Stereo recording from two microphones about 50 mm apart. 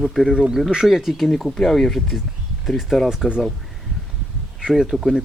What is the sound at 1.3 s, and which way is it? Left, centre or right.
Speech, centre.